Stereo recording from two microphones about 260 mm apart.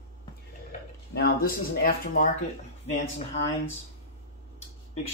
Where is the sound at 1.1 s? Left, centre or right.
Left.